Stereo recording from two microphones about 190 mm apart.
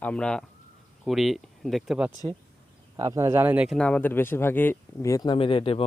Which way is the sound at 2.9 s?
15° right (ahead or behind).